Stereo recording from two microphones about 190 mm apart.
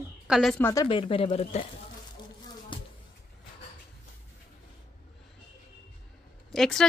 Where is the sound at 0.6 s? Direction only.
20° left (ahead or behind); by 1.6 s 35° left (ahead or behind).